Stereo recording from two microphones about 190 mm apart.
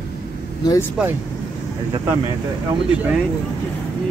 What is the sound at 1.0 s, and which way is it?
Speech, 5° right (ahead or behind).